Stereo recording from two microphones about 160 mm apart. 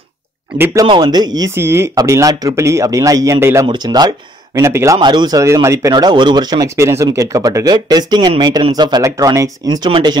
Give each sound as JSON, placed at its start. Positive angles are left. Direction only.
{"t": 0.8, "sound": "speech", "side_deg": -30}